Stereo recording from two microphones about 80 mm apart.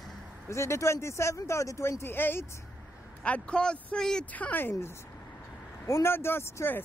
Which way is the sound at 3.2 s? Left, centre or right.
Centre.